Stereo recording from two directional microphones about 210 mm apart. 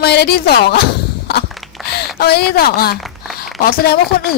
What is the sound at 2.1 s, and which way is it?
Speech, 50° left (ahead or behind).